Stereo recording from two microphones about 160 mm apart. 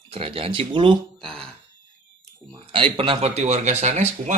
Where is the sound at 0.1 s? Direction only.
35° right (ahead or behind).